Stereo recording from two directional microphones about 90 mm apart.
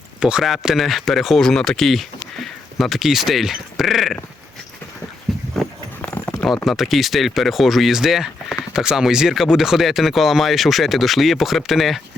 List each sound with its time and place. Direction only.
0.2 s speech: 10° right (ahead or behind)
5.3 s a sound: centre (ahead or behind)
6.0 s clip-clop: 20° left (ahead or behind)
6.7 s speech: centre (ahead or behind)